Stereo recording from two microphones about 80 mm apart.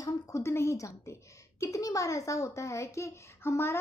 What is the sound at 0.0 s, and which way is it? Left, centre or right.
A woman's voice, left.